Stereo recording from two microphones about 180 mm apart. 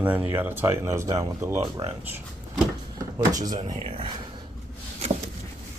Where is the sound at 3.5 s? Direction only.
25° right (ahead or behind).